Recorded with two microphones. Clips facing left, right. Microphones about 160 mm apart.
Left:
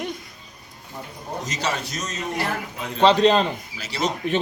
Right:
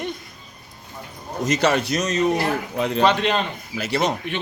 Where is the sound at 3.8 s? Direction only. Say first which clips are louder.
Right 5 dB; 55° right (ahead or behind).